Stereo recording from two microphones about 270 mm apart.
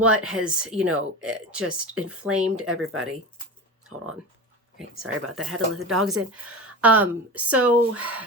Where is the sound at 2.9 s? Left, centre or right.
Right.